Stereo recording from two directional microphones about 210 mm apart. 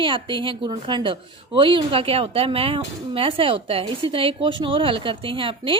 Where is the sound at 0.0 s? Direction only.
25° right (ahead or behind).